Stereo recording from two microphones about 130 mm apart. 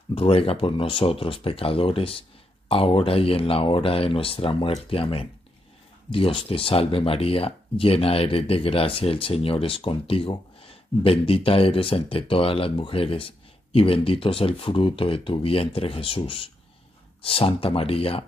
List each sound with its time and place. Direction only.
0.1 s speech: 50° left (ahead or behind)